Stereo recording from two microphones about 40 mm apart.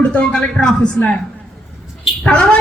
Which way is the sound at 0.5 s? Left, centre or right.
Centre.